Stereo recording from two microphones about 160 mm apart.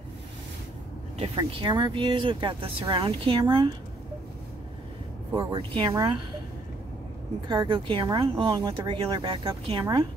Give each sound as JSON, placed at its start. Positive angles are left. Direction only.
{"t": 1.1, "sound": "speech", "side_deg": -35}
{"t": 5.3, "sound": "speech", "side_deg": -30}
{"t": 7.4, "sound": "speech", "side_deg": -30}